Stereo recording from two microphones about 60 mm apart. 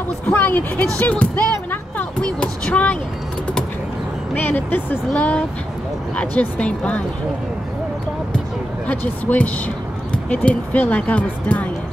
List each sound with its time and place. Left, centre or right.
0.4 s speech: left
0.9 s music: left
2.2 s a sound: centre
4.4 s speech: left
5.1 s speech: centre
8.8 s speech: left